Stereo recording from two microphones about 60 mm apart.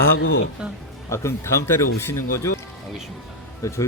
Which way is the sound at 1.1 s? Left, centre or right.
Left.